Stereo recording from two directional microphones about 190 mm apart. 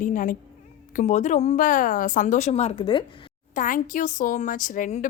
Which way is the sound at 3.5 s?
45° left (ahead or behind).